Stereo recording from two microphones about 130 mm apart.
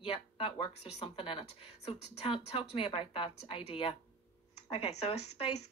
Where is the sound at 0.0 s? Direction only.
45° left (ahead or behind).